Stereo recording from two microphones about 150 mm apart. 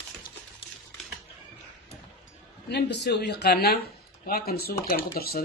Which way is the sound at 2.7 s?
90° left.